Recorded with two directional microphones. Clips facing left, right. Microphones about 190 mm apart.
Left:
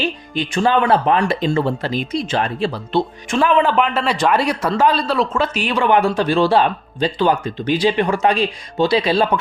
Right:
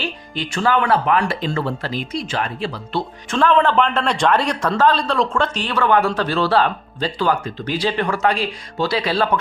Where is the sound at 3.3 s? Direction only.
10° left (ahead or behind).